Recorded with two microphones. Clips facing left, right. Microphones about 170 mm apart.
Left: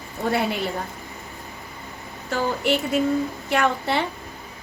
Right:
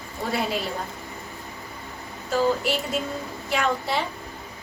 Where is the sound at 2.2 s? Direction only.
65° left (ahead or behind).